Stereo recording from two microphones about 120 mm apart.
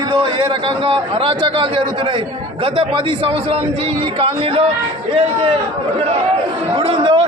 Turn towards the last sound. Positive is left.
turn(degrees=-55)  # may be behind; listen again after turning